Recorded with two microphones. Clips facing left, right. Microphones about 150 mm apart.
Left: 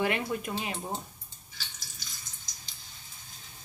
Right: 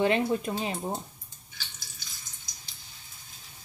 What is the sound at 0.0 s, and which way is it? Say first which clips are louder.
Speech: right 5 dB; 25° right (ahead or behind).